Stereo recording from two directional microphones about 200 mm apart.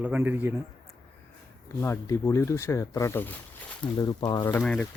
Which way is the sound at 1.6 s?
15° left (ahead or behind).